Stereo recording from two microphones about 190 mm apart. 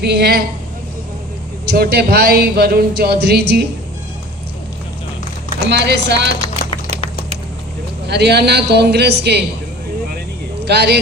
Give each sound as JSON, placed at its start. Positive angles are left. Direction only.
{"t": 0.0, "sound": "speech", "side_deg": -60}
{"t": 1.6, "sound": "speech", "side_deg": -55}
{"t": 5.6, "sound": "speech", "side_deg": -60}
{"t": 8.0, "sound": "speech", "side_deg": -60}
{"t": 10.7, "sound": "speech", "side_deg": -60}